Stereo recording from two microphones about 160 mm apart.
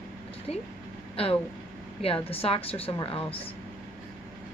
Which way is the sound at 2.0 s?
35° left (ahead or behind).